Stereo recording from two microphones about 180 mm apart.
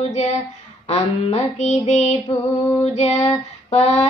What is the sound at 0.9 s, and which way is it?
Child singing, 40° left (ahead or behind).